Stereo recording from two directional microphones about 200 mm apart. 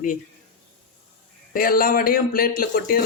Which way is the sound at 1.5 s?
45° left (ahead or behind).